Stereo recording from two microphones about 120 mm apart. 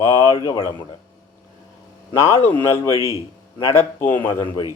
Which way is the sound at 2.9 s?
50° left (ahead or behind).